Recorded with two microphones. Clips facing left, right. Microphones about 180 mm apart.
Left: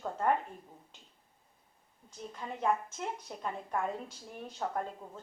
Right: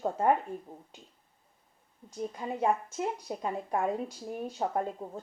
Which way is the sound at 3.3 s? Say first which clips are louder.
Right 5 dB; 40° right (ahead or behind).